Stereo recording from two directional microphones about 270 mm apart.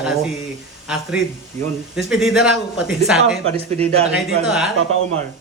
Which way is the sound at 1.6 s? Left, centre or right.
Right.